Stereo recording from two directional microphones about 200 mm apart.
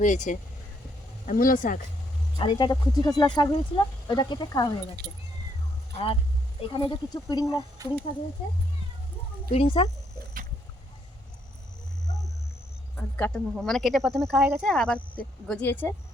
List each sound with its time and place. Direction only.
0.0 s speech: 40° left (ahead or behind)
2.4 s speech: 25° left (ahead or behind)
5.9 s speech: 30° left (ahead or behind)
7.8 s speech: 15° right (ahead or behind)
9.5 s speech: 30° left (ahead or behind)
13.0 s speech: 10° left (ahead or behind)